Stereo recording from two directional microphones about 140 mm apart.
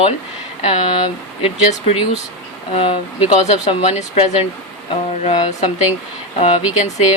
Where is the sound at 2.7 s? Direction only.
45° left (ahead or behind).